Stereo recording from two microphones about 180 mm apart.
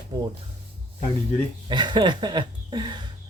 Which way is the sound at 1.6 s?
25° right (ahead or behind).